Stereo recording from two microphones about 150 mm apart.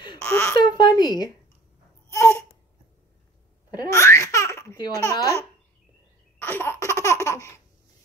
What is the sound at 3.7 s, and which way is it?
Laughter, 20° left (ahead or behind).